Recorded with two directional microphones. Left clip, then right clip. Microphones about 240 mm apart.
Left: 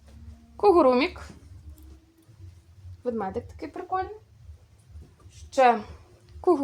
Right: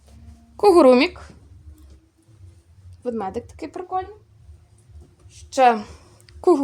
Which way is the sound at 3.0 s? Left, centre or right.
Right.